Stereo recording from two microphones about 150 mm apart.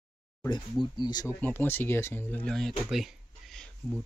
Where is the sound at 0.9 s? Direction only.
30° left (ahead or behind).